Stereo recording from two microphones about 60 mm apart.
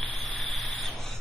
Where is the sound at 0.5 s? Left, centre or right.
Centre.